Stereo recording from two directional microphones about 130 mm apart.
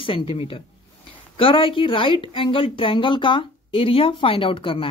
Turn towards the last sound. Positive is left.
turn(degrees=40)  # may be behind; listen again after turning